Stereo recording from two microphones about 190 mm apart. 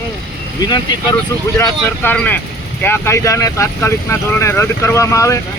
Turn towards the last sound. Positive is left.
turn(degrees=15)  # may be behind; listen again after turning